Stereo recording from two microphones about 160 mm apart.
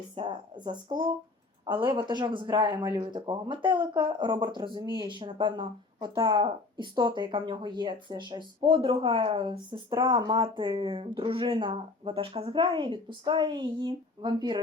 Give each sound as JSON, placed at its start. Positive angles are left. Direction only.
{"t": 0.2, "sound": "speech", "side_deg": -30}